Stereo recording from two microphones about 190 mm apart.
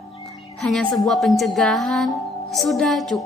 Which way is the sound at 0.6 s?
5° left (ahead or behind).